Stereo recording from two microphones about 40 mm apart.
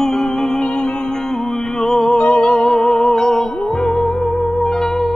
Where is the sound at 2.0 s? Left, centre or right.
Left.